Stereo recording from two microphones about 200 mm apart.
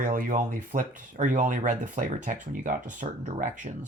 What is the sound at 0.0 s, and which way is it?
Speech, 45° right (ahead or behind).